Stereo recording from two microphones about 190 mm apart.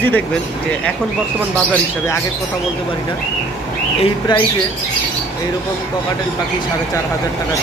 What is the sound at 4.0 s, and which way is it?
Speech, 25° left (ahead or behind).